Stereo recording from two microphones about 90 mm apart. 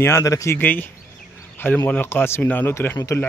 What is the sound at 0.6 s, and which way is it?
Speech, 20° left (ahead or behind).